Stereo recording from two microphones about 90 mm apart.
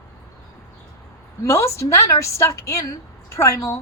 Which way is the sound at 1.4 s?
30° left (ahead or behind).